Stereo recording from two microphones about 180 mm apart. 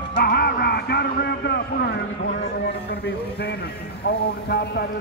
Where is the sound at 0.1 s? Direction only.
60° left (ahead or behind).